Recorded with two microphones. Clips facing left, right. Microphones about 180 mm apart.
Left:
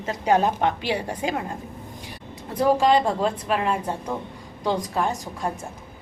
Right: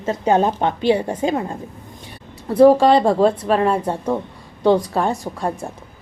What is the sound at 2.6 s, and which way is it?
Speech, 30° right (ahead or behind).